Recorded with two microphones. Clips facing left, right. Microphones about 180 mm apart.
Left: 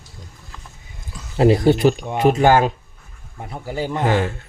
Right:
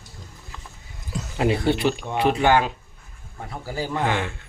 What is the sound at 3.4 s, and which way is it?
Speech, 20° left (ahead or behind).